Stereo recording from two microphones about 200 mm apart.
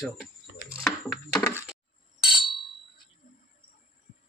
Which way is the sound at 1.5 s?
10° right (ahead or behind).